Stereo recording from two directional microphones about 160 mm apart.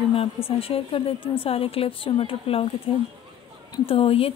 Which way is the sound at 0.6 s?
35° left (ahead or behind).